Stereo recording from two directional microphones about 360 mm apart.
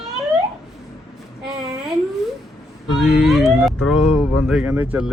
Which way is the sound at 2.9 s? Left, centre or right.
Centre.